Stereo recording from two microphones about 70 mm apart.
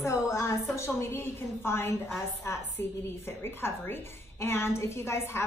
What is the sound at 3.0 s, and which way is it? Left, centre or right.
A woman's voice, left.